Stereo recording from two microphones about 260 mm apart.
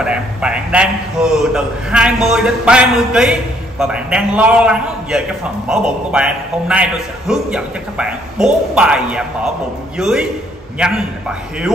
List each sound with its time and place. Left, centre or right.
0.0 s a man's voice: centre